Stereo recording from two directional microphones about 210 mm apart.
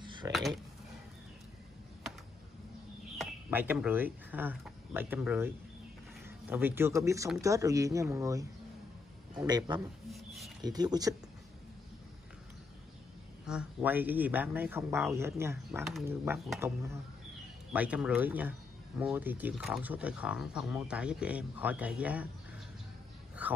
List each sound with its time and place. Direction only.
0.0 s a sound: 20° right (ahead or behind)
0.3 s speech: centre (ahead or behind)
3.2 s speech: 10° right (ahead or behind)
10.1 s a sound: centre (ahead or behind)
10.6 s speech: 20° right (ahead or behind)
13.5 s speech: 5° right (ahead or behind)
23.4 s speech: 10° right (ahead or behind)